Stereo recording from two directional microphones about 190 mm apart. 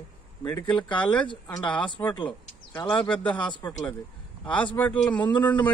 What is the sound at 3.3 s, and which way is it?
Speech, 25° left (ahead or behind).